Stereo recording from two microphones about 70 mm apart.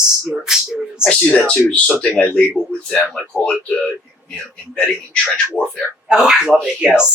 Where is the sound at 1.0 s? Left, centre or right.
Centre.